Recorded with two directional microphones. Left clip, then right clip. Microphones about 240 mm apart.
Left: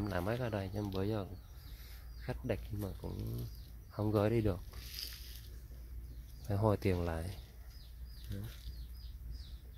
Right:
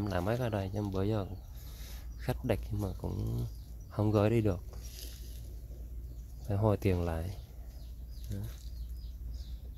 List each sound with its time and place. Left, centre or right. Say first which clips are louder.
0.0 s speech: right 4 dB; centre
5.0 s a sound: left 6 dB; centre
6.4 s speech: right 2 dB; centre